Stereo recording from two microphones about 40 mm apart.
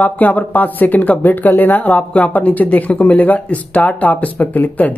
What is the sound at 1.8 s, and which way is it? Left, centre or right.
Speech, left.